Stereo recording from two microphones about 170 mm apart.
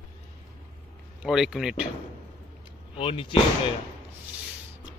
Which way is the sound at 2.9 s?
30° left (ahead or behind).